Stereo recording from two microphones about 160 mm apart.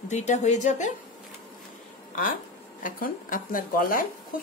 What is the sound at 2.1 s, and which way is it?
Speech, 55° left (ahead or behind).